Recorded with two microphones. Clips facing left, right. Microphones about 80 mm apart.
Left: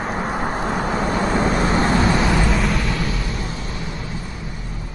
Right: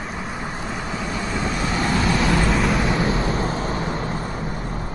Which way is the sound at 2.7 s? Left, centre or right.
Right.